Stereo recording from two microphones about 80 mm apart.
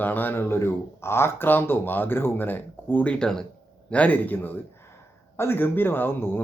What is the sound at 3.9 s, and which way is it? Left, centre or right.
Speech, centre.